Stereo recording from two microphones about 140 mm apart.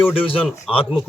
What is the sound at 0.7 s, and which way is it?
Speech, centre (ahead or behind).